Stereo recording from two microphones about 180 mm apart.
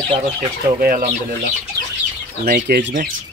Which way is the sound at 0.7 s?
55° right (ahead or behind).